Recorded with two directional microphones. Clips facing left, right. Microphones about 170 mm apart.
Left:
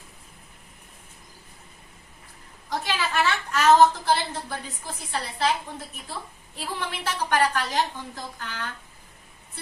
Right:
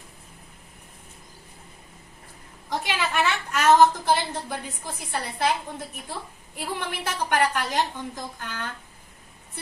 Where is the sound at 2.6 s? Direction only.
15° right (ahead or behind).